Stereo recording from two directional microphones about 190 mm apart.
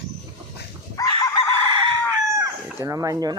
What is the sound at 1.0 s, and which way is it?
Chicken, 20° left (ahead or behind).